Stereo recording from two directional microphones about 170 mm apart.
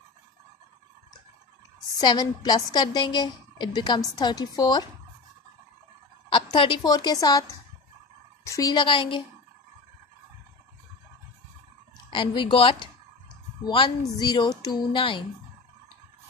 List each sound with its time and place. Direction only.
2.0 s a woman's voice: 25° left (ahead or behind)
6.3 s a woman's voice: 30° left (ahead or behind)
8.5 s a woman's voice: 20° left (ahead or behind)
12.1 s a woman's voice: 30° left (ahead or behind)